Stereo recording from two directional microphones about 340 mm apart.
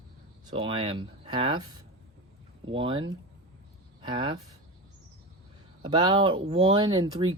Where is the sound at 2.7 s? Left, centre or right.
Centre.